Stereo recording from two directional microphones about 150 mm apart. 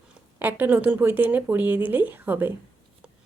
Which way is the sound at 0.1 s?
15° right (ahead or behind).